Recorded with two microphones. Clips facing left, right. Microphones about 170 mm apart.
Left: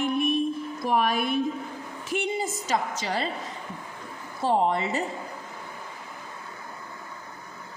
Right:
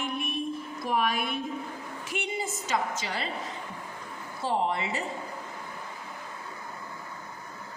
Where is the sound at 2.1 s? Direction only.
40° left (ahead or behind).